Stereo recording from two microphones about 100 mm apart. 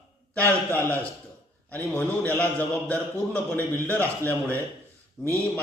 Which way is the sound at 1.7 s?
20° left (ahead or behind).